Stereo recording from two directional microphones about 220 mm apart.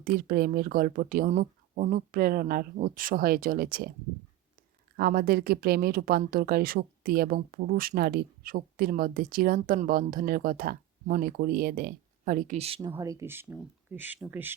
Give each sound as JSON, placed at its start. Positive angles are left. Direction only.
{"t": 0.0, "sound": "speech", "side_deg": -40}
{"t": 4.9, "sound": "speech", "side_deg": -40}
{"t": 12.9, "sound": "speech", "side_deg": -15}